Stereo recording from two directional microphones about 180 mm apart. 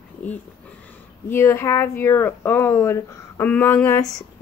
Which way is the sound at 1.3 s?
15° left (ahead or behind).